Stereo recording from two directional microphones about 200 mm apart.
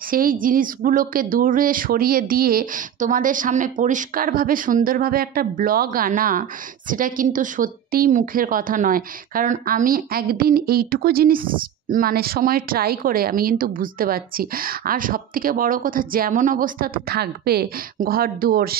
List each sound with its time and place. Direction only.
0.1 s a woman's voice: 45° right (ahead or behind)